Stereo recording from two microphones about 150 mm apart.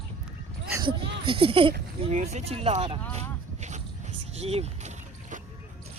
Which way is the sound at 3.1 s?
50° right (ahead or behind).